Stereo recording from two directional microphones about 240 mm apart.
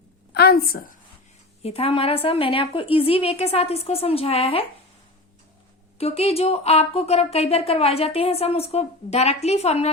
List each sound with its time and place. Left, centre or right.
0.3 s a woman's voice: left
1.6 s speech: left
6.0 s speech: left